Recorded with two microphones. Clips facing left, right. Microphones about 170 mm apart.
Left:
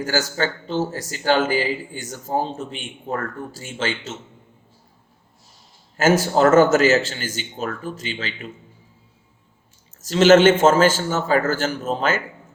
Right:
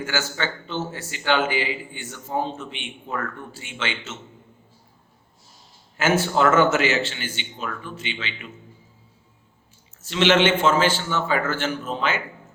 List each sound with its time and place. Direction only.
0.0 s a man's voice: 40° left (ahead or behind)
6.0 s a man's voice: 40° left (ahead or behind)
10.0 s a man's voice: 40° left (ahead or behind)